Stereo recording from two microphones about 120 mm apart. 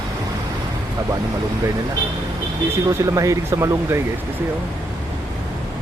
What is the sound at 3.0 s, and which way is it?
Speech, 25° right (ahead or behind).